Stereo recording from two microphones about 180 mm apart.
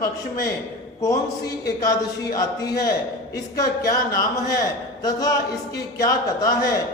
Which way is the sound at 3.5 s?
20° left (ahead or behind).